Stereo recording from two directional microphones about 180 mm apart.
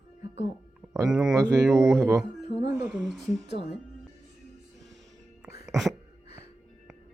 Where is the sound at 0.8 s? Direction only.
20° right (ahead or behind).